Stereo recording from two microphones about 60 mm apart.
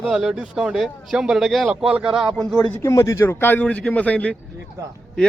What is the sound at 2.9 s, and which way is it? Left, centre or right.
Speech, left.